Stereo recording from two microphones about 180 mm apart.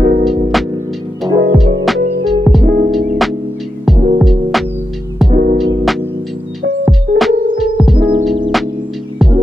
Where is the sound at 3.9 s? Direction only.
Centre (ahead or behind).